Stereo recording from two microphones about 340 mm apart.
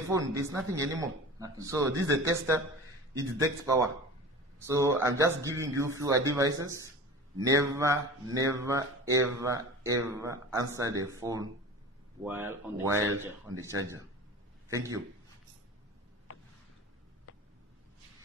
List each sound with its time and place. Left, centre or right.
0.0 s a man's voice: centre